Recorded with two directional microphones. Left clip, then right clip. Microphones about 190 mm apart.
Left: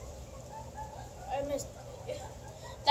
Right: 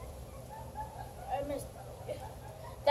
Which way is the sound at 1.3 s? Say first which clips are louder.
Left 1 dB; 5° right (ahead or behind).